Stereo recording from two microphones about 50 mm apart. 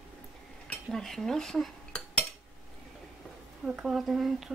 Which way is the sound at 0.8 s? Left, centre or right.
Centre.